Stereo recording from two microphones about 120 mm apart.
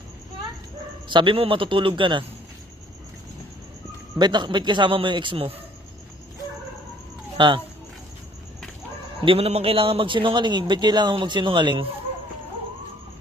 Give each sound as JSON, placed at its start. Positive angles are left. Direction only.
{"t": 1.0, "sound": "a man's voice", "side_deg": -45}
{"t": 4.2, "sound": "a man's voice", "side_deg": -40}
{"t": 7.3, "sound": "speech", "side_deg": -40}
{"t": 9.2, "sound": "a man's voice", "side_deg": -50}